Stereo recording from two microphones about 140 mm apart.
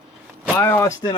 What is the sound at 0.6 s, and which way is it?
Speech, 20° left (ahead or behind).